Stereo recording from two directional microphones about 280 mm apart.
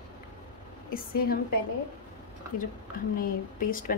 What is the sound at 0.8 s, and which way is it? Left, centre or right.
Speech, left.